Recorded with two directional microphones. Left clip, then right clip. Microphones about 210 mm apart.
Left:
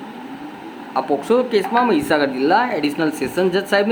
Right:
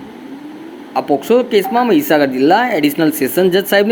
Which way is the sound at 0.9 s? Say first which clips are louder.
Right 4 dB; 10° right (ahead or behind).